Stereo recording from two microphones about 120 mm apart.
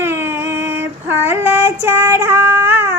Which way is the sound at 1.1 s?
15° right (ahead or behind).